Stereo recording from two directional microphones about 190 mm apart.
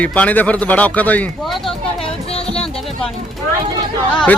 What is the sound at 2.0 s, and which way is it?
Music, 30° left (ahead or behind).